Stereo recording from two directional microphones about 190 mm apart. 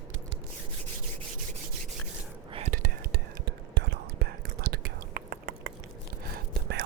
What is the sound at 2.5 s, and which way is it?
Whispering, 30° right (ahead or behind).